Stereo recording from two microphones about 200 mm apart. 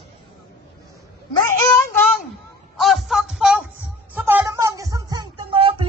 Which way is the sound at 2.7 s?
Centre (ahead or behind).